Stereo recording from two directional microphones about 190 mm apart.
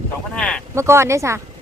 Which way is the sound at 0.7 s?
15° right (ahead or behind).